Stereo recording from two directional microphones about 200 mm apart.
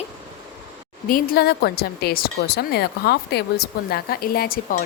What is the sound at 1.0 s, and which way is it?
A woman's voice, 45° left (ahead or behind).